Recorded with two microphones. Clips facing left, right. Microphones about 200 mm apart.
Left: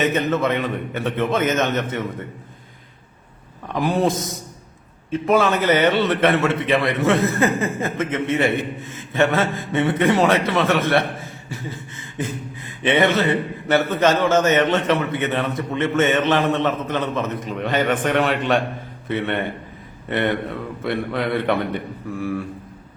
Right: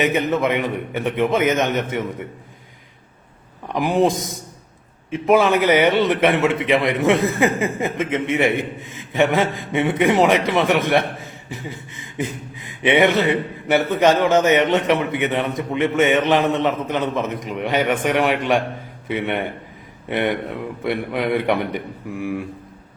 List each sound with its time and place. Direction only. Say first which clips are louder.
0.0 s a man's voice: right 1 dB; 15° right (ahead or behind)
3.7 s a man's voice: right 2 dB; 15° right (ahead or behind)